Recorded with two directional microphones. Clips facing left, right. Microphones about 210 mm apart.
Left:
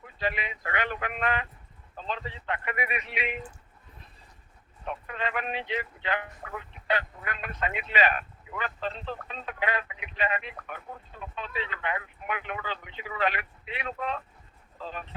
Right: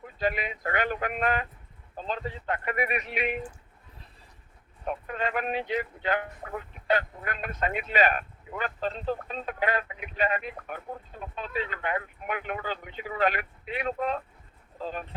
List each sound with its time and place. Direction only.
0.2 s speech: 45° right (ahead or behind)
4.9 s speech: 40° right (ahead or behind)